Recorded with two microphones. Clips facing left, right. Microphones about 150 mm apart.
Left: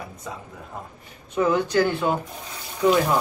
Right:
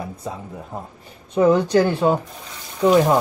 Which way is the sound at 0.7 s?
30° right (ahead or behind).